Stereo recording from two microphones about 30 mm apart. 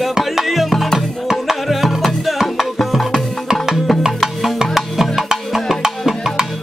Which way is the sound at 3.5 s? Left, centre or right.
Centre.